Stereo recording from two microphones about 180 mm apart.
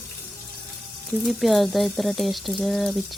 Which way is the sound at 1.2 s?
Centre (ahead or behind).